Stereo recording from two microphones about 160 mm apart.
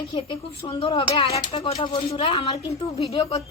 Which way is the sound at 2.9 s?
35° left (ahead or behind).